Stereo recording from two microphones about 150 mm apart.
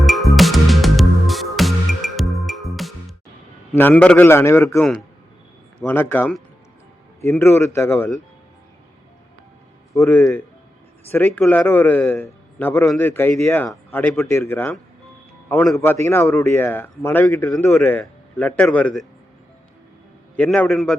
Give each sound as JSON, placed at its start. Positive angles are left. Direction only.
{"t": 0.0, "sound": "music", "side_deg": 0}
{"t": 3.8, "sound": "a man's voice", "side_deg": 10}
{"t": 4.8, "sound": "speech", "side_deg": 5}
{"t": 5.8, "sound": "a man's voice", "side_deg": 15}
{"t": 9.9, "sound": "a man's voice", "side_deg": 20}
{"t": 17.5, "sound": "a man's voice", "side_deg": 5}
{"t": 20.3, "sound": "a man's voice", "side_deg": 10}